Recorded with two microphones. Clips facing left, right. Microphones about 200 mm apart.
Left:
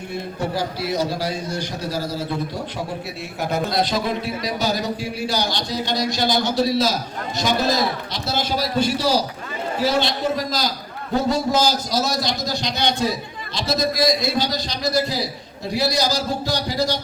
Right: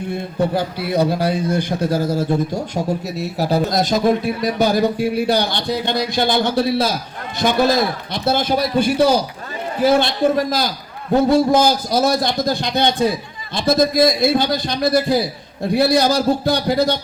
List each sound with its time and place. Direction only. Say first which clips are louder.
0.5 s a man's voice: right 4 dB; 55° right (ahead or behind)
8.1 s a man's voice: right 6 dB; 55° right (ahead or behind)